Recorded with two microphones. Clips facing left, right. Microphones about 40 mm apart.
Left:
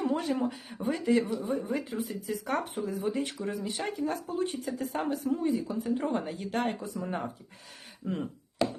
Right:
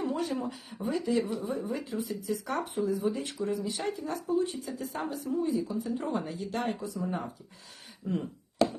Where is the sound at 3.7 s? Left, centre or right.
Left.